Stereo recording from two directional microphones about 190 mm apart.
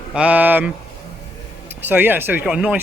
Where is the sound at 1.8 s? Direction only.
10° right (ahead or behind).